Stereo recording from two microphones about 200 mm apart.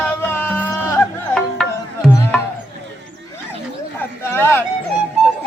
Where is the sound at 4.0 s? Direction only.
10° left (ahead or behind).